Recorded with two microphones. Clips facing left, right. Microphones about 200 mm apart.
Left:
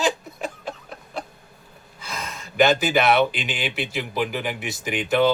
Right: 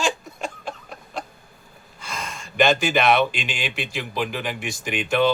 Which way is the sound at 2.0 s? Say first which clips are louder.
Even; centre (ahead or behind).